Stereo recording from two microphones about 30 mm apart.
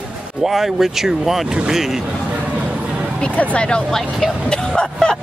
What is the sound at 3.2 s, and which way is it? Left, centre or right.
Speech, left.